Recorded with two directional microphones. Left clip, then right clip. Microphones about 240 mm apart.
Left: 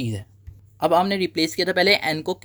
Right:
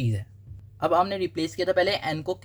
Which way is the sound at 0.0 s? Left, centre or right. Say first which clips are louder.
Left 3 dB; left.